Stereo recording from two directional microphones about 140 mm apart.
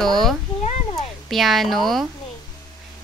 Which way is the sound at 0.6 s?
50° left (ahead or behind).